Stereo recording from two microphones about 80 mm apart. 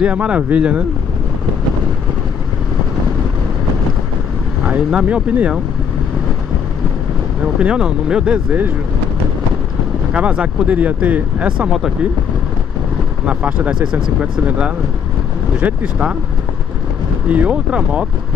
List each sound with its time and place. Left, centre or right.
0.0 s speech: centre
4.6 s speech: centre
7.4 s speech: centre
10.1 s speech: centre
13.2 s speech: centre
17.3 s speech: centre